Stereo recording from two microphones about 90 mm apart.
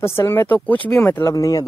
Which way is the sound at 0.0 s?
30° left (ahead or behind).